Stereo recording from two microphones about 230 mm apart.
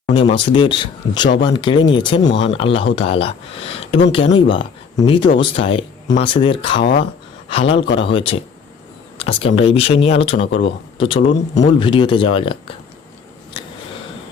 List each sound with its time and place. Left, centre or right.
0.0 s a man's voice: left